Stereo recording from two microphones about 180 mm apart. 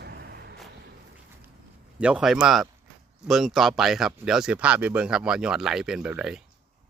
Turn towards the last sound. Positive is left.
turn(degrees=-5)  # may be behind; listen again after turning